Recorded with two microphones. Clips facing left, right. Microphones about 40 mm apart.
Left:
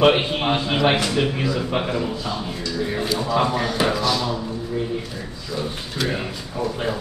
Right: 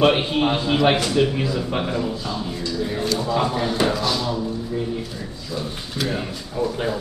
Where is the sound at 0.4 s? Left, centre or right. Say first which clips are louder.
Right 1 dB; left.